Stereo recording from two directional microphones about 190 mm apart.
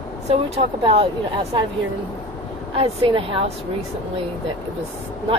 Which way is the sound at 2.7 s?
30° right (ahead or behind).